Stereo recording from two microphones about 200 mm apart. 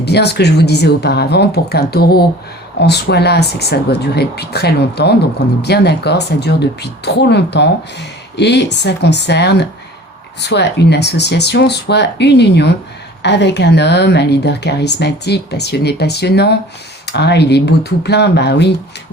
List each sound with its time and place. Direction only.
0.0 s speech: 55° left (ahead or behind)